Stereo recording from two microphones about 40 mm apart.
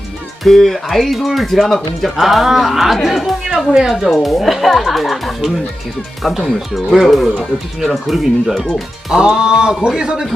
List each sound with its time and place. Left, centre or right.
0.4 s speech: centre
2.1 s speech: centre
3.4 s speech: centre
3.8 s speech: centre
9.1 s speech: centre